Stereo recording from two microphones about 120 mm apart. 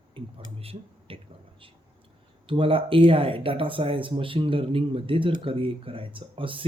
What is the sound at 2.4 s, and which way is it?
Speech, 45° right (ahead or behind).